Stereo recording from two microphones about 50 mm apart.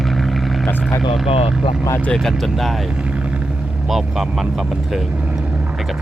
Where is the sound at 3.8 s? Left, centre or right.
Centre.